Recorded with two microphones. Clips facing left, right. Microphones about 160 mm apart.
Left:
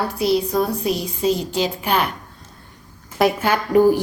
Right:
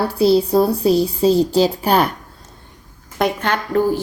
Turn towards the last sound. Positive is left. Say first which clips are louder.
# left 3 dB
turn(degrees=15)  # may be behind; listen again after turning